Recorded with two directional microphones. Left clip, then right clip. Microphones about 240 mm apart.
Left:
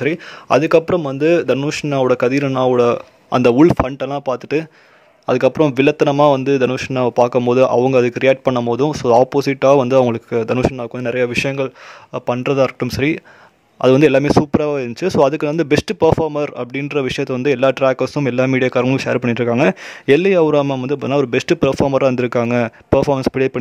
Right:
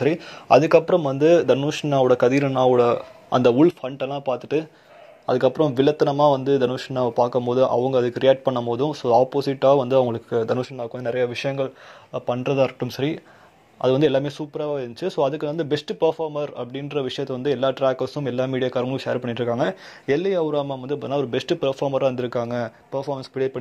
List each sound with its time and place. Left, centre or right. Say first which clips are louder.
0.0 s speech: left 2 dB; left
20.1 s speech: left 9 dB; left
20.6 s speech: left 8 dB; left
22.5 s speech: left 11 dB; left
23.3 s speech: left 7 dB; left